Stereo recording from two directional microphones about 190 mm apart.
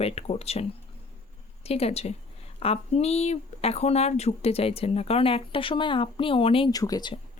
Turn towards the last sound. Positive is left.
turn(degrees=20)  # may be behind; listen again after turning